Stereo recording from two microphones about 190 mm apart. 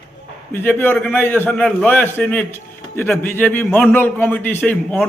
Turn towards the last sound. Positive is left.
turn(degrees=10)  # may be behind; listen again after turning